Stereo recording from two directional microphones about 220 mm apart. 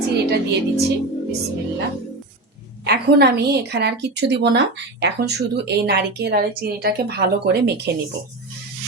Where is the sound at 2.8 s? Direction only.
45° right (ahead or behind).